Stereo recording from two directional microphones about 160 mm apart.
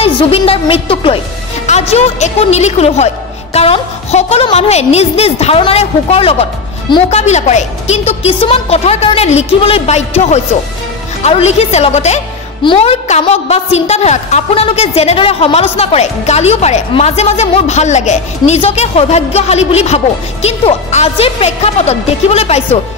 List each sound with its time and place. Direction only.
0.0 s a woman's voice: 40° left (ahead or behind)